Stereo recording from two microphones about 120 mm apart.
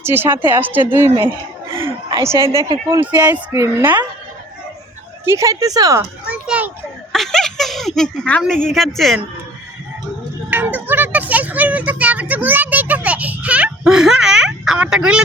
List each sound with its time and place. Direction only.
0.0 s speech: 20° right (ahead or behind)
2.2 s speech: 25° right (ahead or behind)
3.0 s speech: 40° right (ahead or behind)
3.5 s speech: 25° right (ahead or behind)
5.2 s speech: 25° right (ahead or behind)
6.2 s children playing: 10° right (ahead or behind)
7.1 s a sound: 5° left (ahead or behind)
8.7 s speech: centre (ahead or behind)
10.5 s a sound: 15° right (ahead or behind)